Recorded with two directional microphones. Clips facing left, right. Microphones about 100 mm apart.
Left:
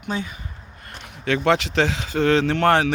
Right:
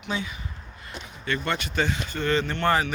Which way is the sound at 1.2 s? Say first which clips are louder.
Left 9 dB; 90° left.